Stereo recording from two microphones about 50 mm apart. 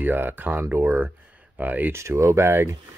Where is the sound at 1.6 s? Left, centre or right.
Right.